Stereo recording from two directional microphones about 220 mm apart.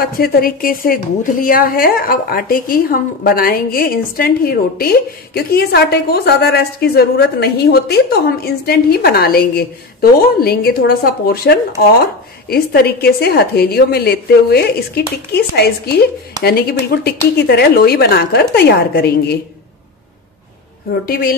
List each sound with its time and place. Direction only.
0.0 s a woman's voice: 40° left (ahead or behind)
21.0 s speech: 40° left (ahead or behind)